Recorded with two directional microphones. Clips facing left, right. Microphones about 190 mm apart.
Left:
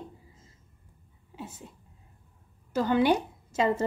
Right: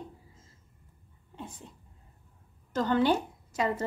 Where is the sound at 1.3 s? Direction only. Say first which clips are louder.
Left 2 dB; 5° left (ahead or behind).